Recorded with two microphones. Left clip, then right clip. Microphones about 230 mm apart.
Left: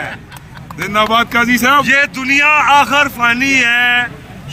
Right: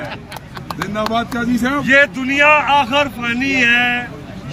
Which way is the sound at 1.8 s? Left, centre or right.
Centre.